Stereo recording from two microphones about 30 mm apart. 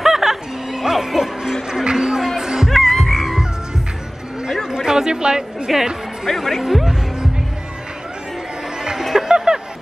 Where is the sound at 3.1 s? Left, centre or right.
Centre.